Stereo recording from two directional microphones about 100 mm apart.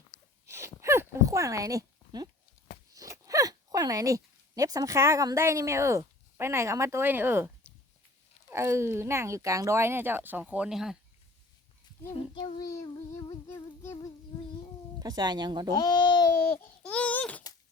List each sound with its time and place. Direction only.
0.4 s a sound: 30° right (ahead or behind)
2.9 s speech: 35° right (ahead or behind); by 10.9 s 5° right (ahead or behind)
12.6 s child singing: 35° left (ahead or behind)
14.9 s speech: 40° right (ahead or behind)
15.7 s a child's voice: 40° left (ahead or behind)
16.8 s a sound: 10° left (ahead or behind)